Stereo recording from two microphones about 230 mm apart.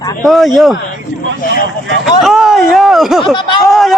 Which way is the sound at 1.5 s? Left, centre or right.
Left.